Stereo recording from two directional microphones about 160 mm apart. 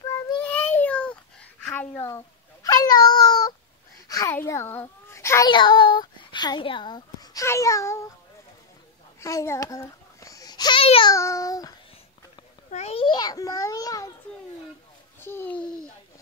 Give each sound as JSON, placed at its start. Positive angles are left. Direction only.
{"t": 0.4, "sound": "a sound", "side_deg": 10}
{"t": 4.1, "sound": "a child's voice", "side_deg": 20}
{"t": 5.5, "sound": "a child's voice", "side_deg": 30}
{"t": 9.2, "sound": "babbling", "side_deg": 20}
{"t": 11.1, "sound": "a child's voice", "side_deg": 20}
{"t": 12.7, "sound": "a child's voice", "side_deg": 40}
{"t": 13.0, "sound": "a child's voice", "side_deg": 25}
{"t": 15.1, "sound": "a child's voice", "side_deg": 15}